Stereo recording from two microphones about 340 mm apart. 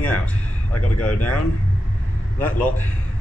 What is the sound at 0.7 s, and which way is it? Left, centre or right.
Speech, left.